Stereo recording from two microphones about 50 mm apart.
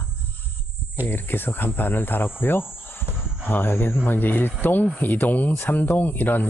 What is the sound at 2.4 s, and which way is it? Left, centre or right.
Cricket, left.